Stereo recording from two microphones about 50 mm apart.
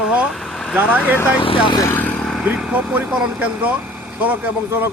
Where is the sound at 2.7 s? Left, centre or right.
Right.